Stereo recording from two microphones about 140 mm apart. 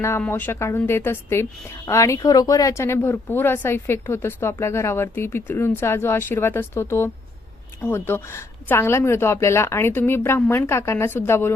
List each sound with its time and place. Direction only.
0.2 s speech: 15° left (ahead or behind)